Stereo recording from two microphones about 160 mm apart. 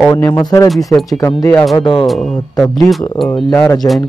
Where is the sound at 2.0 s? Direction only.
Centre (ahead or behind).